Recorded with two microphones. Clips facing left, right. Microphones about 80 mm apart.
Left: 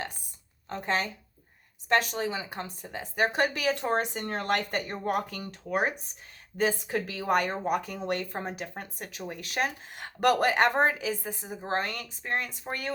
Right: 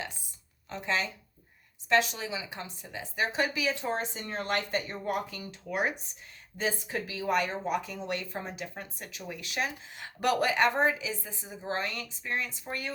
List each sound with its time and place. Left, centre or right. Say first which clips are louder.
0.7 s a woman's voice: left 2 dB; left
5.6 s a woman's voice: left 3 dB; left